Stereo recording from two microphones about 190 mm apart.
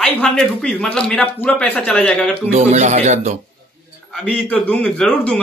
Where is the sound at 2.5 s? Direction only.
35° right (ahead or behind).